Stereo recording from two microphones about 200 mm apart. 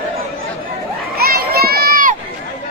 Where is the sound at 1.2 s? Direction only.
50° right (ahead or behind).